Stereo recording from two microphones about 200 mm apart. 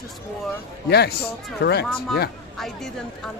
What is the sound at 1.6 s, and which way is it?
Speech, 55° left (ahead or behind).